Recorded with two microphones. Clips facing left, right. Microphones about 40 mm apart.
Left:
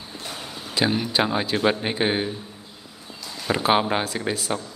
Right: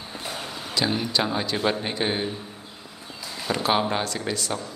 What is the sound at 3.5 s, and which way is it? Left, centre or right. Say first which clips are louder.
A man's voice: left 3 dB; centre.